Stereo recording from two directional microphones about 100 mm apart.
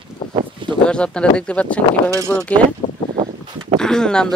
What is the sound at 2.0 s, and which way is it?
Speech, 30° right (ahead or behind).